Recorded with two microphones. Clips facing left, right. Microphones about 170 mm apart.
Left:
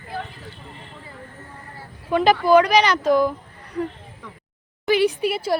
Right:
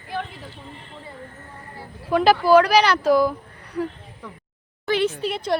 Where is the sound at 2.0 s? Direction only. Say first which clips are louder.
Even; 5° right (ahead or behind).